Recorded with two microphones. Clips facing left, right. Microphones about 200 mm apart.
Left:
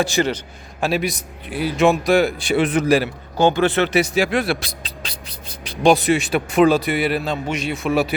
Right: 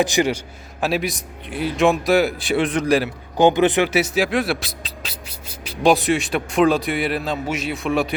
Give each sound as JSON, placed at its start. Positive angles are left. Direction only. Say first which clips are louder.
{"t": 0.0, "sound": "a man's voice", "louder": "right 1 dB", "side_deg": -15}
{"t": 0.8, "sound": "speech", "louder": "left 1 dB", "side_deg": 0}
{"t": 3.3, "sound": "speech", "louder": "right 1 dB", "side_deg": -15}